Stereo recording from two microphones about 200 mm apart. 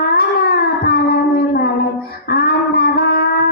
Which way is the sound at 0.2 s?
50° left (ahead or behind).